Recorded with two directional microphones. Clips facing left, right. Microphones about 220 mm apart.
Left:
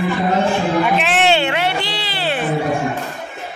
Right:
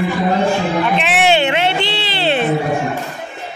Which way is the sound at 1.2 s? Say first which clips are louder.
Right 4 dB; 15° right (ahead or behind).